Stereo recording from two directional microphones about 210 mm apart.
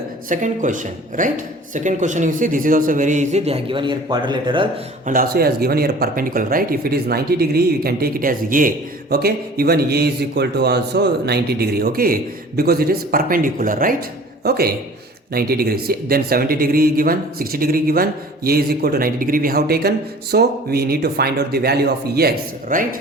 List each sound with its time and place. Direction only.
0.3 s a man's voice: 35° right (ahead or behind)
5.0 s a man's voice: 45° right (ahead or behind)